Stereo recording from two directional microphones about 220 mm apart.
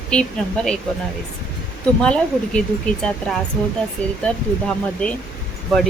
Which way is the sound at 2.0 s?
5° left (ahead or behind).